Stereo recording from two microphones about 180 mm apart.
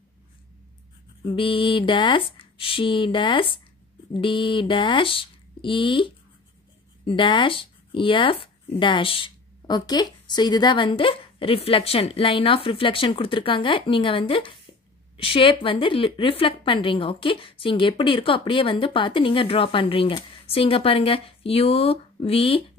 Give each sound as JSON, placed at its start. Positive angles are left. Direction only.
{"t": 1.3, "sound": "speech", "side_deg": 30}